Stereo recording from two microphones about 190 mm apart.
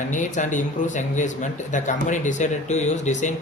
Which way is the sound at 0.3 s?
40° left (ahead or behind).